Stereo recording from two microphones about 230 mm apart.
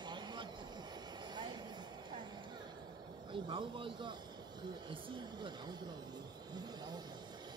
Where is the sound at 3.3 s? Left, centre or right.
Right.